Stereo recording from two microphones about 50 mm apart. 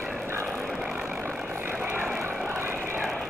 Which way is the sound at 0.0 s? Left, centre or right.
Right.